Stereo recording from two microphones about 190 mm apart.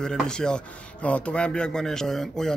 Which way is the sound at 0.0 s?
5° left (ahead or behind).